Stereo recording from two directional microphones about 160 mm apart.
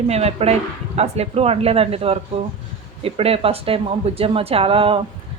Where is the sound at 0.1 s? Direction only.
40° right (ahead or behind).